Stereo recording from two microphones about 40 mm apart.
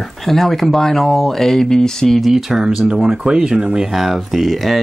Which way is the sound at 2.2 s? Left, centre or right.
Centre.